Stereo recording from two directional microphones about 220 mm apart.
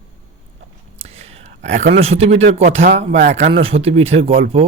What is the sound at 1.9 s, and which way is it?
Speech, 25° right (ahead or behind).